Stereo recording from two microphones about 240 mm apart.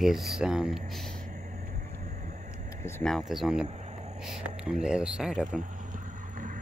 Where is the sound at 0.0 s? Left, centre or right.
Centre.